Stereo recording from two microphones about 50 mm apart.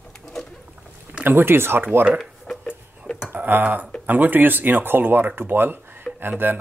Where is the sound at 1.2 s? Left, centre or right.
Right.